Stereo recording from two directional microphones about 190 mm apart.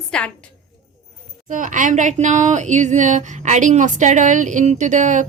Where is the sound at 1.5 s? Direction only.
45° right (ahead or behind).